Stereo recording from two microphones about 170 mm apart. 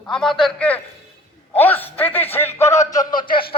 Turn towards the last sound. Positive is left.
turn(degrees=30)  # may be behind; listen again after turning